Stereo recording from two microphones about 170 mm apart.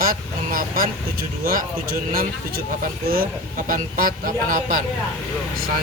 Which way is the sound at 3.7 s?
55° right (ahead or behind).